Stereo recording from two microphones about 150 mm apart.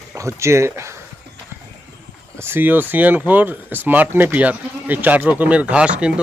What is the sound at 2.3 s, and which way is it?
Speech, 15° right (ahead or behind).